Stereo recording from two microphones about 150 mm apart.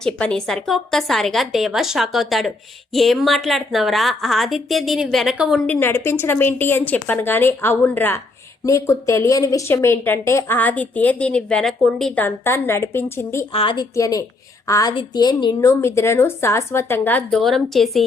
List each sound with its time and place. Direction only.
0.0 s a woman's voice: 5° left (ahead or behind)
5.6 s speech: 10° left (ahead or behind)
12.2 s speech: 15° left (ahead or behind)
13.5 s a woman's voice: 35° left (ahead or behind)
13.9 s a woman's voice: 20° left (ahead or behind)
15.8 s speech: 15° left (ahead or behind); by 18.0 s centre (ahead or behind)